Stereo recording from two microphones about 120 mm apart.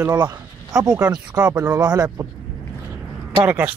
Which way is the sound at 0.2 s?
30° right (ahead or behind).